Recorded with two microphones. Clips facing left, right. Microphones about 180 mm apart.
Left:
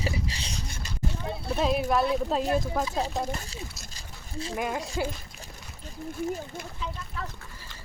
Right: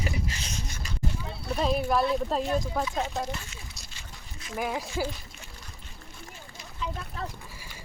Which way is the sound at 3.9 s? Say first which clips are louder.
Left 9 dB; 30° left (ahead or behind).